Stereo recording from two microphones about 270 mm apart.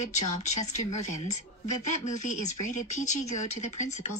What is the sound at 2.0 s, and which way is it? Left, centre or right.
A woman's voice, left.